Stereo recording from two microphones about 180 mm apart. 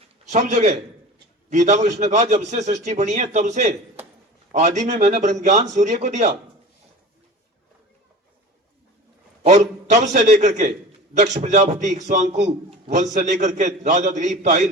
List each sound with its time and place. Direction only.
0.3 s a man's voice: 40° right (ahead or behind)
9.4 s a man's voice: 40° right (ahead or behind)